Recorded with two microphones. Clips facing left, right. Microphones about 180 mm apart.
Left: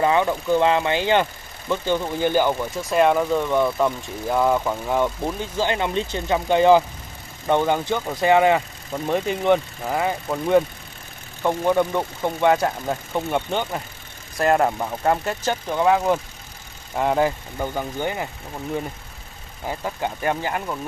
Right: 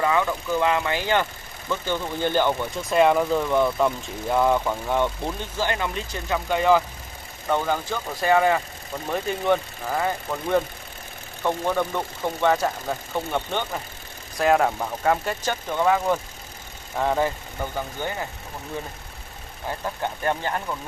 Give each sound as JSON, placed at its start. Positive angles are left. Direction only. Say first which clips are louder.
{"t": 0.0, "sound": "speech", "louder": "left 3 dB", "side_deg": 25}
{"t": 5.6, "sound": "speech", "louder": "left 4 dB", "side_deg": 20}
{"t": 14.4, "sound": "speech", "louder": "left 1 dB", "side_deg": 0}
{"t": 19.7, "sound": "speech", "louder": "left 2 dB", "side_deg": 15}